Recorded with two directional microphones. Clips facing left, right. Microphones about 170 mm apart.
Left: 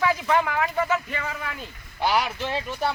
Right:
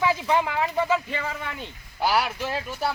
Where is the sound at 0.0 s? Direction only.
25° right (ahead or behind).